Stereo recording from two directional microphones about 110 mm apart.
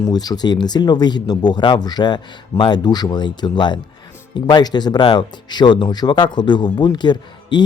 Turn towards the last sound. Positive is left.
turn(degrees=40)  # may be behind; listen again after turning